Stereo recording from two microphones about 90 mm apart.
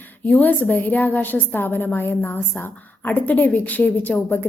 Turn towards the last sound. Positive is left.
turn(degrees=20)  # may be behind; listen again after turning